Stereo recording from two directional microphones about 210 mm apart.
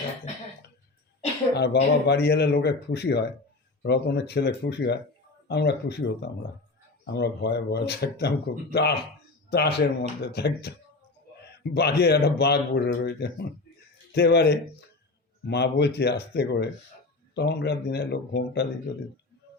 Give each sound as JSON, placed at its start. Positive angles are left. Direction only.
{"t": 1.5, "sound": "speech", "side_deg": 50}